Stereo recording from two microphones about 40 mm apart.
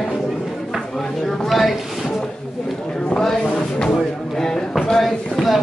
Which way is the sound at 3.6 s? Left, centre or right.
Centre.